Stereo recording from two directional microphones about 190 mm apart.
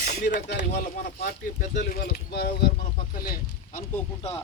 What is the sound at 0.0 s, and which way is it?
Speech, 55° left (ahead or behind).